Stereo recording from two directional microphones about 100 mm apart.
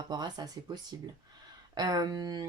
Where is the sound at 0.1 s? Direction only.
45° right (ahead or behind).